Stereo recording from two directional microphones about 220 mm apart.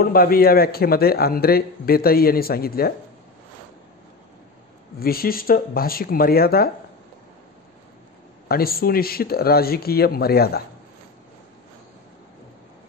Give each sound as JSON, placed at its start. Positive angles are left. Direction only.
{"t": 0.0, "sound": "a man's voice", "side_deg": 40}
{"t": 4.9, "sound": "a man's voice", "side_deg": 45}
{"t": 8.5, "sound": "a man's voice", "side_deg": 45}